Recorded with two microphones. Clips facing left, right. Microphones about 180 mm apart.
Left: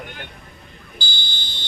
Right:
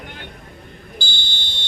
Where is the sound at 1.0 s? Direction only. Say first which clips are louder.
Right 1 dB; 45° right (ahead or behind).